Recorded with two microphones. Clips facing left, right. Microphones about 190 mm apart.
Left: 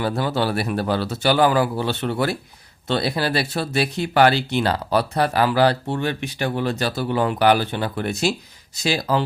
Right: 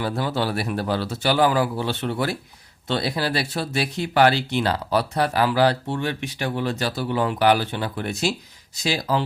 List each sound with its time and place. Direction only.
0.0 s speech: 60° left (ahead or behind)